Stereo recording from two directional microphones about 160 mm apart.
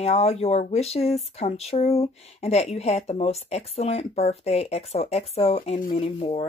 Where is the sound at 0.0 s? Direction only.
40° left (ahead or behind).